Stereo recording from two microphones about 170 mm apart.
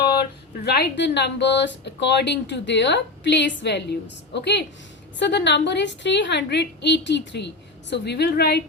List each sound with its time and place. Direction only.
0.6 s speech: 75° left (ahead or behind)